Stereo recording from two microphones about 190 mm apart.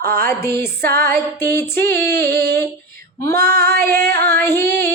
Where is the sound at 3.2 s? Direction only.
15° left (ahead or behind).